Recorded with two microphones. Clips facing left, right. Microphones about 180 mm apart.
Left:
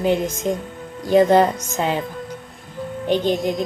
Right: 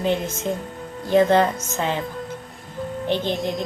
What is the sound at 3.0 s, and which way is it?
Speech, 15° left (ahead or behind).